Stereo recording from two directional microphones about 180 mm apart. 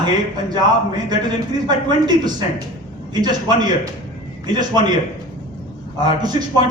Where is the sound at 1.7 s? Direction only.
25° right (ahead or behind).